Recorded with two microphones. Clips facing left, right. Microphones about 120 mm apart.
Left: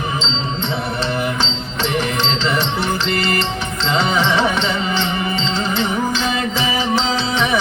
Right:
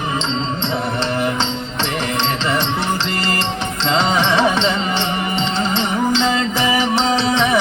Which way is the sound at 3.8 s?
20° right (ahead or behind).